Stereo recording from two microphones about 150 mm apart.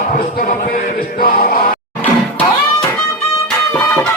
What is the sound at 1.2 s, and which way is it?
Male singing, 70° left (ahead or behind).